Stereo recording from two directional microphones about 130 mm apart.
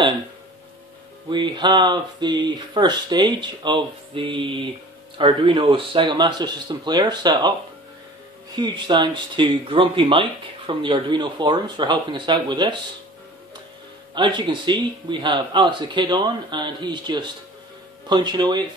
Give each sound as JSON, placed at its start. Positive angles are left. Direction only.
{"t": 1.3, "sound": "speech", "side_deg": -35}
{"t": 8.5, "sound": "speech", "side_deg": -35}
{"t": 14.1, "sound": "speech", "side_deg": -35}